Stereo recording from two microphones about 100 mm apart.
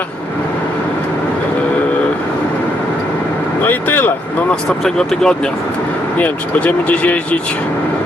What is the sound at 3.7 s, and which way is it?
Speech, 20° left (ahead or behind).